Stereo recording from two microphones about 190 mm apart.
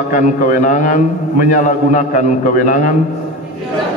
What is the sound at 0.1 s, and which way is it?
A man's voice, 45° left (ahead or behind).